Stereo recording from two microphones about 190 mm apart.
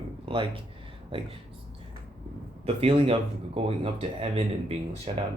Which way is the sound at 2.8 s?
30° right (ahead or behind).